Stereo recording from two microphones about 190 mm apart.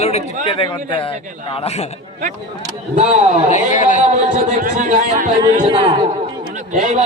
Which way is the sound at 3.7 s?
40° left (ahead or behind).